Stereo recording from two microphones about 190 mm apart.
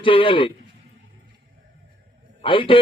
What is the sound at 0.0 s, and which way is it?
Speech, 25° left (ahead or behind).